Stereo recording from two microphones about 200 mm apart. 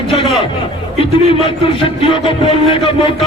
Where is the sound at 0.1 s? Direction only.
25° left (ahead or behind).